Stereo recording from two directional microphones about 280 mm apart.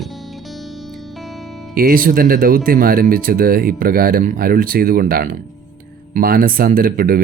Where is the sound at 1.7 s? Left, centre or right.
Right.